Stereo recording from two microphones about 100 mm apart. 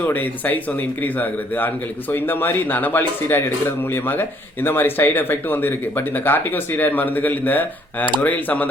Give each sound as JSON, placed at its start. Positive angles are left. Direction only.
{"t": 0.0, "sound": "a man's voice", "side_deg": 15}